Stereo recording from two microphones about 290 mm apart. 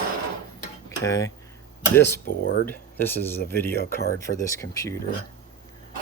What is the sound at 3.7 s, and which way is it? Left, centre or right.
Speech, left.